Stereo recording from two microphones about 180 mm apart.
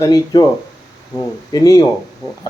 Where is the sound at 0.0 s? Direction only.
20° left (ahead or behind).